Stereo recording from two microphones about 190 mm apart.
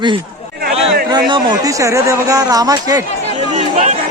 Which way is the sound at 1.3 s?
20° right (ahead or behind).